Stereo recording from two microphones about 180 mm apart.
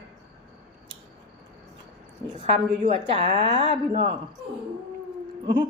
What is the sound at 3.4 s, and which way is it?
Speech, 30° right (ahead or behind).